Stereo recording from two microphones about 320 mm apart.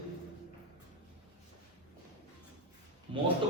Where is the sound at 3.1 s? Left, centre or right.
Centre.